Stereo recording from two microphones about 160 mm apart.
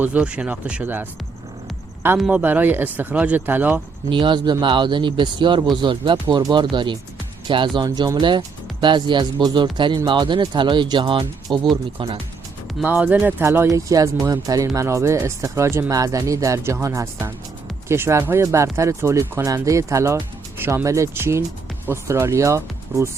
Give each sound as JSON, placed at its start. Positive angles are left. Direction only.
{"t": 0.0, "sound": "speech", "side_deg": -10}
{"t": 2.1, "sound": "speech", "side_deg": -5}
{"t": 4.1, "sound": "speech", "side_deg": -30}
{"t": 12.8, "sound": "speech", "side_deg": -10}